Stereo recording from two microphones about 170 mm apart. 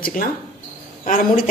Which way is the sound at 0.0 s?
55° left (ahead or behind).